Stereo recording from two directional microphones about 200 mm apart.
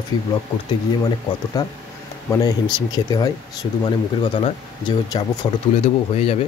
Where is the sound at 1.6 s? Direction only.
20° left (ahead or behind).